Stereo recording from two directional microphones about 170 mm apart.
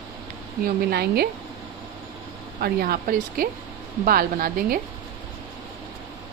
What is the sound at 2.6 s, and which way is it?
Speech, 65° right (ahead or behind).